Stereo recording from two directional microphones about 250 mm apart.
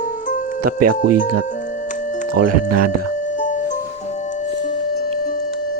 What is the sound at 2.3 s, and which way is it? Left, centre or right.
Speech, right.